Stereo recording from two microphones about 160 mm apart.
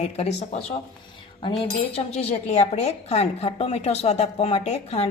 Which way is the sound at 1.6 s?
40° left (ahead or behind).